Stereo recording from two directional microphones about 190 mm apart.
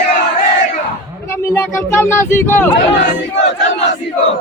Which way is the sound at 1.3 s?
15° left (ahead or behind).